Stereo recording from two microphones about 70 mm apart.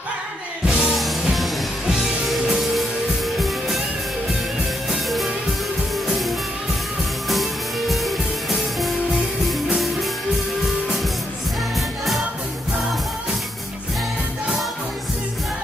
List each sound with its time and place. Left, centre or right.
0.7 s music: centre
7.9 s music: centre